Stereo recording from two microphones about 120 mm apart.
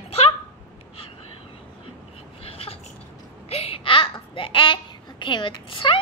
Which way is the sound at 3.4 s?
55° left (ahead or behind).